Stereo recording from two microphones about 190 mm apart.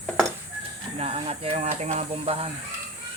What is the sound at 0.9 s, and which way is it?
Speech, 30° right (ahead or behind).